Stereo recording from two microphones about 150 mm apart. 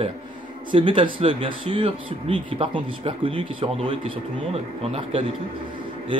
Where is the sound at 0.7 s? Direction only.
35° right (ahead or behind).